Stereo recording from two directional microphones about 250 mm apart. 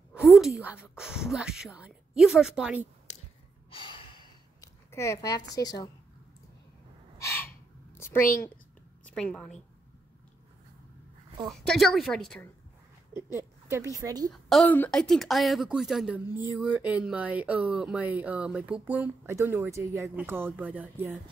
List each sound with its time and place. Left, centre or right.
0.1 s a sound: centre
0.7 s speech: centre
3.7 s sigh: centre
7.2 s gasp: centre
7.9 s a sound: centre
9.0 s a woman's voice: centre
11.4 s speech: centre
13.7 s a woman's voice: centre
14.3 s speech: centre